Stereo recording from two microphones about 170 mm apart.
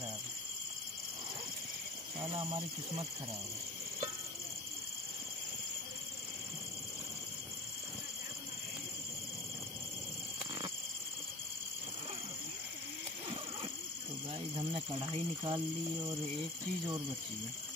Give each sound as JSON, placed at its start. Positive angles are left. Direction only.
{"t": 15.0, "sound": "speech", "side_deg": -25}